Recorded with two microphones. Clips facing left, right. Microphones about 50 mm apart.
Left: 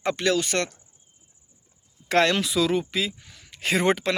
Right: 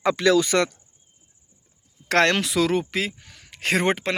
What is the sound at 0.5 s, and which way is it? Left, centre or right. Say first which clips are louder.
Speech: right 5 dB; right.